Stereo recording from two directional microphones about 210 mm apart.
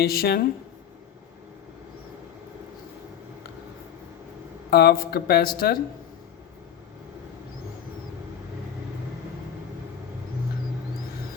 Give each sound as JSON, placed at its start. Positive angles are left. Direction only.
{"t": 0.0, "sound": "speech", "side_deg": 45}
{"t": 4.7, "sound": "speech", "side_deg": 50}